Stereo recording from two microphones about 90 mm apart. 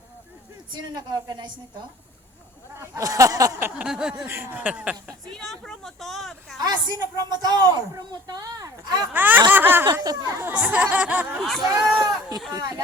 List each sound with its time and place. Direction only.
0.7 s a woman's voice: 55° right (ahead or behind)
2.9 s a sound: 40° right (ahead or behind)
3.8 s speech: 5° right (ahead or behind)
4.3 s speech: 25° right (ahead or behind)
5.0 s speech: 5° left (ahead or behind)
6.6 s a woman's voice: 50° right (ahead or behind)
9.1 s speech: 20° right (ahead or behind)
9.8 s a woman's voice: 50° right (ahead or behind)
10.4 s speech: 15° right (ahead or behind)
11.6 s a woman's voice: 45° right (ahead or behind)
12.5 s a sound: 40° right (ahead or behind)